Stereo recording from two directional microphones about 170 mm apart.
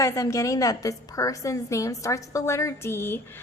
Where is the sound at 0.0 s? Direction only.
20° left (ahead or behind).